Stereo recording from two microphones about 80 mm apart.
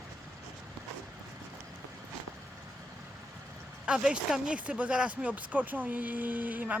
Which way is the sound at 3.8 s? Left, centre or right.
Centre.